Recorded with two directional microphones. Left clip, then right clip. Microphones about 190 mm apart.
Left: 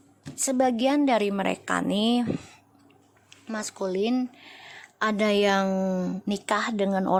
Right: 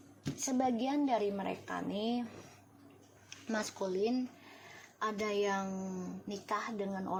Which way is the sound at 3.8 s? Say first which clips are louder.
Left 9 dB; 40° left (ahead or behind).